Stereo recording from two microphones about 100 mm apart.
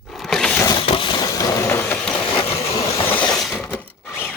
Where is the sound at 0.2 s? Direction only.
5° left (ahead or behind).